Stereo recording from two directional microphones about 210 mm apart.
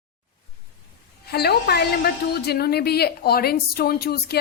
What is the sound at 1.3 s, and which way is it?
A woman's voice, 50° left (ahead or behind).